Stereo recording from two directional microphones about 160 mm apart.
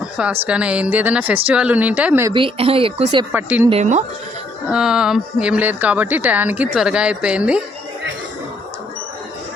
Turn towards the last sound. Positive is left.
turn(degrees=-5)  # may be behind; listen again after turning